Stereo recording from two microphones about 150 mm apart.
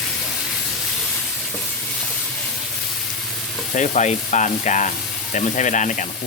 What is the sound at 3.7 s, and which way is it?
Speech, 50° left (ahead or behind).